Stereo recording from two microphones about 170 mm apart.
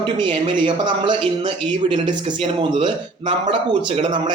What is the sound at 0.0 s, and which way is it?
A man's voice, 30° right (ahead or behind).